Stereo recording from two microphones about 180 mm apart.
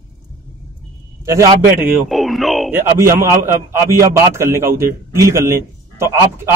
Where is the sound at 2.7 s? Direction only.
15° right (ahead or behind).